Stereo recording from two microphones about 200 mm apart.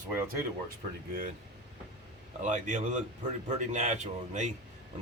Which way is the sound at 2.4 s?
35° right (ahead or behind).